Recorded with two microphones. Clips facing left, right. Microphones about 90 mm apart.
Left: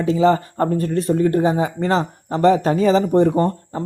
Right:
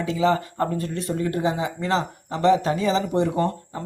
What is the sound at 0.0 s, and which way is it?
Speech, 35° left (ahead or behind).